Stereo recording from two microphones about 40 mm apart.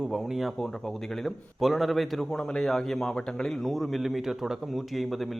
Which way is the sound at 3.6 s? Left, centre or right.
Centre.